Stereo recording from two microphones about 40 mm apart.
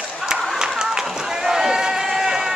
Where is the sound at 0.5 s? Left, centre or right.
Centre.